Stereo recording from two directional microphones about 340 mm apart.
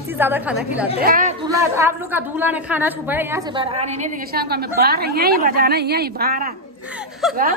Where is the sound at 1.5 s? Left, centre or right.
Centre; by 7.6 s right.